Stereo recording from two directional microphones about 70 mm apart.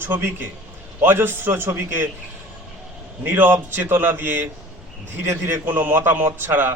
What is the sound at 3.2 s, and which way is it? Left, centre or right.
A man's voice, right.